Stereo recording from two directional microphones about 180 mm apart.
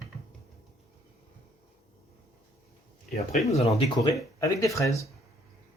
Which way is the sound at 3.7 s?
20° left (ahead or behind).